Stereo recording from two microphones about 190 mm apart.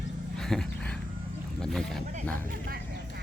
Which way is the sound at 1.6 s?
Centre (ahead or behind).